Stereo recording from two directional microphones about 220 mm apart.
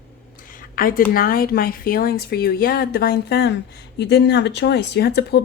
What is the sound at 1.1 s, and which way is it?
Speech, 40° left (ahead or behind).